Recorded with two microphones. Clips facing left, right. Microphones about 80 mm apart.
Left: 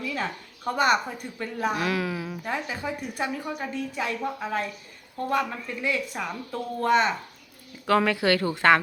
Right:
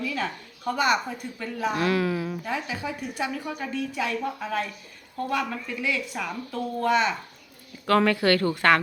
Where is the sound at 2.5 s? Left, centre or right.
Left.